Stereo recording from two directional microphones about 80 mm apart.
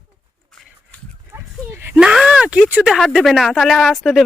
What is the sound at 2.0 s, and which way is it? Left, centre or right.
Speech, centre.